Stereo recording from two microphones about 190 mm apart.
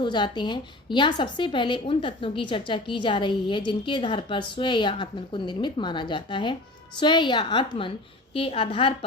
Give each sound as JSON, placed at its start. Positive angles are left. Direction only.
{"t": 0.0, "sound": "a woman's voice", "side_deg": 25}